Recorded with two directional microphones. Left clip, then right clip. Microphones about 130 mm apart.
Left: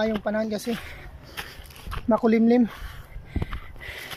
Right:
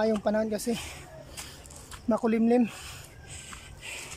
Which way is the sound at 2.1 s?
Centre (ahead or behind).